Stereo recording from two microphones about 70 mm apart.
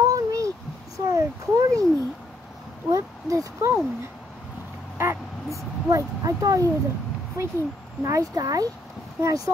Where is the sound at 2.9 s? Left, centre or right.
Right.